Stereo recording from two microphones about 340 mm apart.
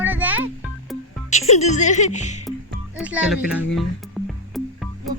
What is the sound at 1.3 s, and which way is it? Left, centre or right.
Speech, centre.